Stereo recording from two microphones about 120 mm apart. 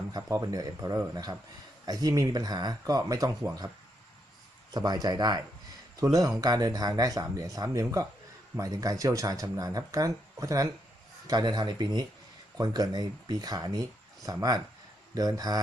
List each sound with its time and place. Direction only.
0.1 s speech: 30° right (ahead or behind)
4.7 s speech: 35° right (ahead or behind)